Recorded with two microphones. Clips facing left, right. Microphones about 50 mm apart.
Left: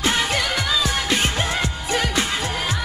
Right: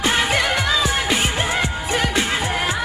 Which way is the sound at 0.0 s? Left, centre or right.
Right.